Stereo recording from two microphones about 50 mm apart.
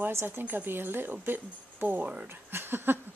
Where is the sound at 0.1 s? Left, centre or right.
Right.